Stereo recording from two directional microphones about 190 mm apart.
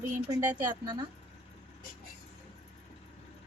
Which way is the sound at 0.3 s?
20° right (ahead or behind).